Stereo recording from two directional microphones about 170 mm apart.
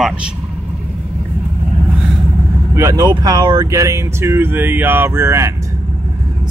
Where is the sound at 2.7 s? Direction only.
20° right (ahead or behind).